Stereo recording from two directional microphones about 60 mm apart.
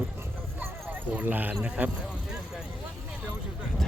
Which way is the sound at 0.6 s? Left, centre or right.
Right.